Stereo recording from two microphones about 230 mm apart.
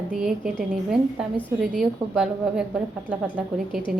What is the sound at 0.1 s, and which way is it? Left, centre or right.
A woman's voice, centre.